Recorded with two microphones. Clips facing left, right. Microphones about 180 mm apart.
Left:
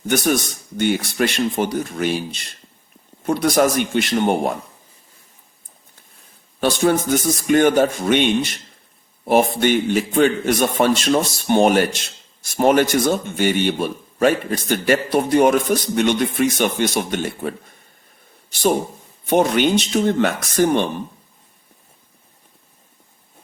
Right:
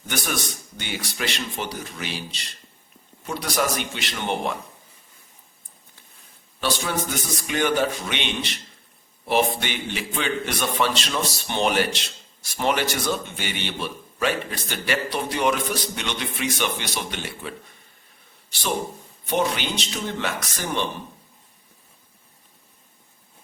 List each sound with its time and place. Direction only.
0.1 s a man's voice: 45° left (ahead or behind)
6.6 s a man's voice: 50° left (ahead or behind)
19.2 s a man's voice: 50° left (ahead or behind)